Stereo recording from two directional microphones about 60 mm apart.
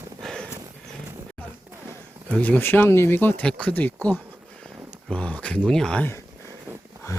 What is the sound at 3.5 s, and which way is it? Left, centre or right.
Speech, left.